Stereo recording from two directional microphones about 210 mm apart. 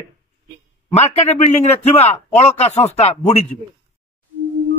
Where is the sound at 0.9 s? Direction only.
30° left (ahead or behind).